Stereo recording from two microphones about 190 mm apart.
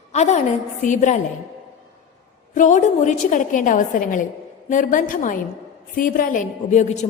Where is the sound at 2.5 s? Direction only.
40° left (ahead or behind).